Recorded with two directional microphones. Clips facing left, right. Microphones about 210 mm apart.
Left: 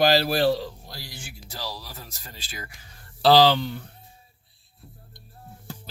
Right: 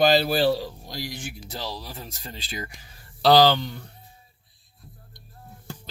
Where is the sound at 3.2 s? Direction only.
5° left (ahead or behind).